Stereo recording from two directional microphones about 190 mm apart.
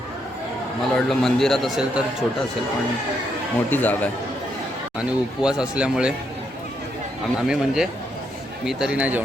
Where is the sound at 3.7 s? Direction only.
10° left (ahead or behind).